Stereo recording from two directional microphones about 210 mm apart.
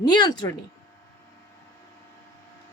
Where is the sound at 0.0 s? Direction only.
20° left (ahead or behind).